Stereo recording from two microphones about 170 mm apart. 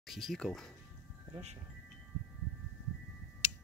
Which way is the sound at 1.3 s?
40° right (ahead or behind).